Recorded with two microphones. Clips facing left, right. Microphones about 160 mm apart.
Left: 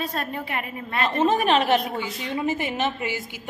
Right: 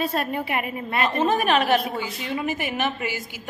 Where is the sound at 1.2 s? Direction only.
25° left (ahead or behind).